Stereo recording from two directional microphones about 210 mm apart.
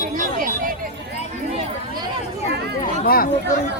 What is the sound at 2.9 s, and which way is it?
Speech, 45° left (ahead or behind).